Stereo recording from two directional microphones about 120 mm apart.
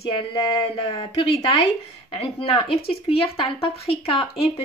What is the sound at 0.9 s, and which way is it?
Speech, 50° left (ahead or behind).